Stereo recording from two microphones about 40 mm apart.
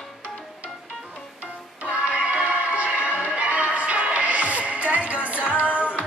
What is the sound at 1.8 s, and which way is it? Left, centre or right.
Music, right.